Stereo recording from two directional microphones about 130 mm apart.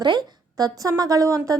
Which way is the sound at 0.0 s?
35° right (ahead or behind).